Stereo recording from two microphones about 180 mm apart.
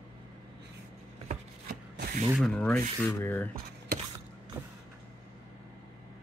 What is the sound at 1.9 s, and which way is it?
Rub, 60° right (ahead or behind).